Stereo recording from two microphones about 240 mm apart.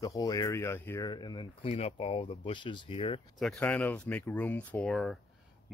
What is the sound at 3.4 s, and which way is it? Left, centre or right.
Speech, centre.